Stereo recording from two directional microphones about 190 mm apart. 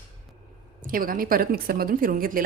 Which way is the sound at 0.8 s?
50° right (ahead or behind).